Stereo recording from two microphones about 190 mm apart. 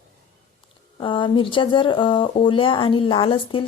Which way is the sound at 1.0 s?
25° left (ahead or behind).